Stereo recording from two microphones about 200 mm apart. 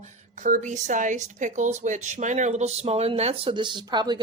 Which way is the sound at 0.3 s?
40° right (ahead or behind).